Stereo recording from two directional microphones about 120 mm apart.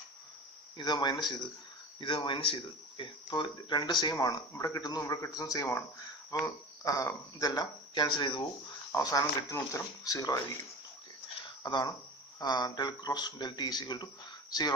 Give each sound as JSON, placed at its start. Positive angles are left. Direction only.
{"t": 0.8, "sound": "speech", "side_deg": 40}
{"t": 11.6, "sound": "speech", "side_deg": 35}